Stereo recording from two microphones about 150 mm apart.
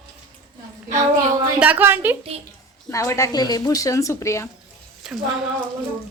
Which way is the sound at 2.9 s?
20° left (ahead or behind).